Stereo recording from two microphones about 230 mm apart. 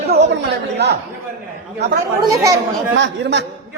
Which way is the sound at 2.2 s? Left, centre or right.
Centre.